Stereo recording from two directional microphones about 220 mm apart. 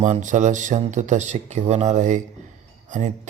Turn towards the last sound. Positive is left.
turn(degrees=-35)  # may be behind; listen again after turning